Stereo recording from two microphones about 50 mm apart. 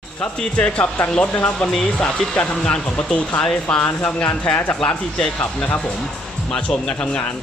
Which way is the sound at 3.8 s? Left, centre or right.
Left.